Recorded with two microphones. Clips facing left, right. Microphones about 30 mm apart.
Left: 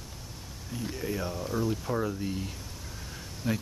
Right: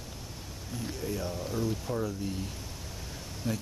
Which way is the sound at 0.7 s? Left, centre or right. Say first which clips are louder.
Left 2 dB; centre.